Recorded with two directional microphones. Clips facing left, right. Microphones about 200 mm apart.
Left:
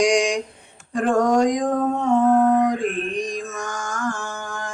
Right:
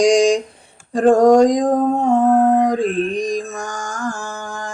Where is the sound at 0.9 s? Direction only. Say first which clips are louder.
Right 7 dB; 35° right (ahead or behind).